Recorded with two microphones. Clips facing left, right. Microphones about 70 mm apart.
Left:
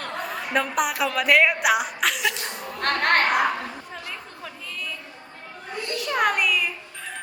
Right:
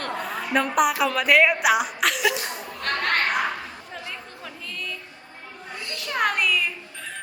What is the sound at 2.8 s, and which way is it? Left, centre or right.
Speech, left.